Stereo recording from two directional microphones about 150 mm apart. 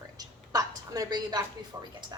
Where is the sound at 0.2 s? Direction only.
25° right (ahead or behind).